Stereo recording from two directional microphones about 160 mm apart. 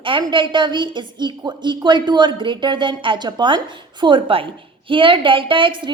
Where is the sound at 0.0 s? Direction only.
30° right (ahead or behind).